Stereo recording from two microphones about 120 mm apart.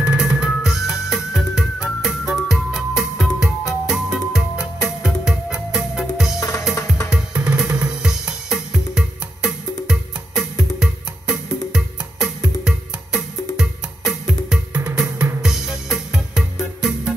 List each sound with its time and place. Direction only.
0.0 s music: 10° right (ahead or behind)